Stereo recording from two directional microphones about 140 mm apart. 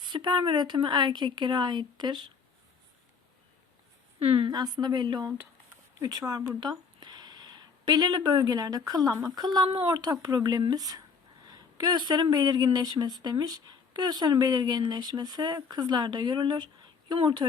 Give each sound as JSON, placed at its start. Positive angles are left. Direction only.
{"t": 0.0, "sound": "speech", "side_deg": -35}
{"t": 4.2, "sound": "speech", "side_deg": -30}